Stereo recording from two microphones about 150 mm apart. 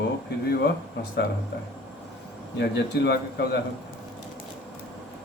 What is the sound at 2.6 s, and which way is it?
Speech, 90° left.